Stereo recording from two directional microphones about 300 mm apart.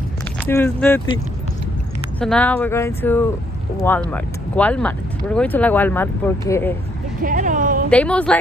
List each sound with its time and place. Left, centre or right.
0.5 s speech: centre
2.1 s speech: centre
7.2 s speech: right
7.9 s speech: centre